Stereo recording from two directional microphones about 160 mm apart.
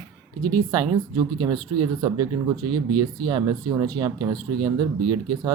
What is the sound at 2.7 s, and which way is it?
Speech, 25° right (ahead or behind).